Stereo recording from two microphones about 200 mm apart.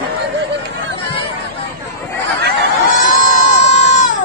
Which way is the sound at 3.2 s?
35° left (ahead or behind).